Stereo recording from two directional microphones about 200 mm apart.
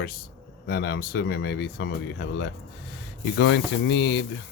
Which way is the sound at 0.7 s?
55° left (ahead or behind).